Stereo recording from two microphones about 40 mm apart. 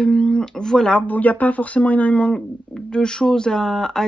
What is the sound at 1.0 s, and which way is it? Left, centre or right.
Speech, left.